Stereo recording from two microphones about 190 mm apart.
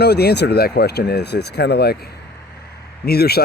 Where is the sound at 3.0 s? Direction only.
55° left (ahead or behind).